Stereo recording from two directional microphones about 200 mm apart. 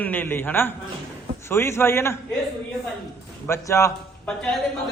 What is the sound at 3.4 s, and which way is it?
Speech, 15° left (ahead or behind).